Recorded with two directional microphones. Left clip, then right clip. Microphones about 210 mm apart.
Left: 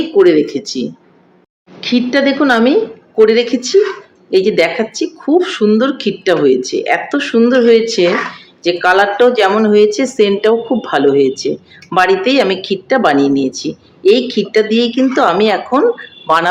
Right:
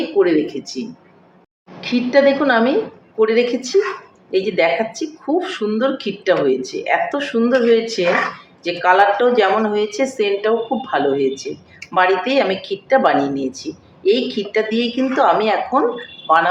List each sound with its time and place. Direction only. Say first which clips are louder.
0.2 s a woman's voice: left 7 dB; 55° left (ahead or behind)
1.8 s a woman's voice: left 1 dB; 55° left (ahead or behind)